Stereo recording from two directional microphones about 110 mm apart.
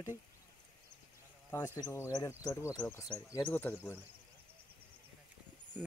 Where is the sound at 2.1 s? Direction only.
35° left (ahead or behind).